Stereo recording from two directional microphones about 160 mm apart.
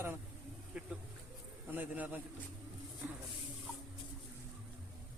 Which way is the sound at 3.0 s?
10° right (ahead or behind).